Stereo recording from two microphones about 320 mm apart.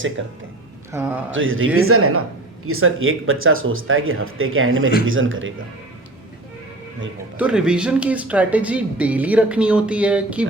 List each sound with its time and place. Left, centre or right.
0.2 s speech: right
0.9 s a man's voice: centre
1.3 s speech: right
7.3 s speech: centre